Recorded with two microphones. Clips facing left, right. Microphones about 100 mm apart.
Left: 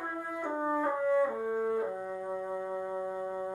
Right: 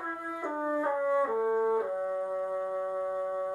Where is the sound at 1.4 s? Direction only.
35° right (ahead or behind).